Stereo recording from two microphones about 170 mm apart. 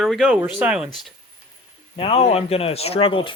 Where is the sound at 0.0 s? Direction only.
Centre (ahead or behind).